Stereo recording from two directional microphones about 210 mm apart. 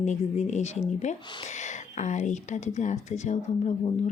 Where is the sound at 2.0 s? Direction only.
35° left (ahead or behind).